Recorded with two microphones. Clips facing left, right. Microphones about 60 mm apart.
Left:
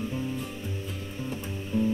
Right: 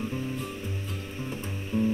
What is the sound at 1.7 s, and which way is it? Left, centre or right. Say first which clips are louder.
Music: even; right.